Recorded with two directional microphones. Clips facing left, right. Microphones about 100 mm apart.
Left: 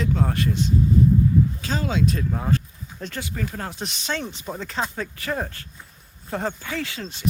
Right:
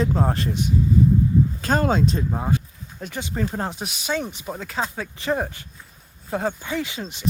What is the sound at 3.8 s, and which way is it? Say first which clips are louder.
Speech: right 2 dB; 10° right (ahead or behind).